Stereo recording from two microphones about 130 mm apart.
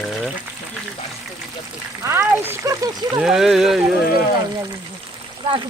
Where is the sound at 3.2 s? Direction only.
5° right (ahead or behind).